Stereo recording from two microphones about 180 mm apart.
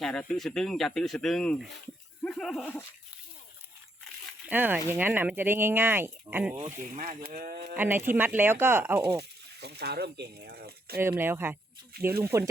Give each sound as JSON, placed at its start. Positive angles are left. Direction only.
{"t": 0.0, "sound": "speech", "side_deg": 5}
{"t": 4.4, "sound": "speech", "side_deg": -10}
{"t": 6.7, "sound": "speech", "side_deg": -45}
{"t": 7.8, "sound": "speech", "side_deg": -10}
{"t": 9.6, "sound": "speech", "side_deg": -65}
{"t": 11.0, "sound": "speech", "side_deg": -10}